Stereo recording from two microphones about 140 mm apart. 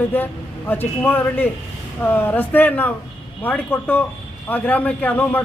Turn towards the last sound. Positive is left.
turn(degrees=10)  # may be behind; listen again after turning